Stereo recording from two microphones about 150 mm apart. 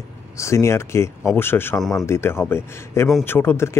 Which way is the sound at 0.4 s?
20° left (ahead or behind).